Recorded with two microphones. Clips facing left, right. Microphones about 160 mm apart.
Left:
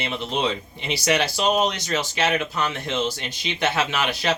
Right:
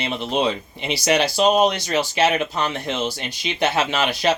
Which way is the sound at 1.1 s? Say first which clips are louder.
Right 6 dB; 30° right (ahead or behind).